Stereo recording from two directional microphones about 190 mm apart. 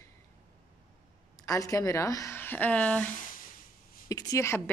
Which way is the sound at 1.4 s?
15° left (ahead or behind).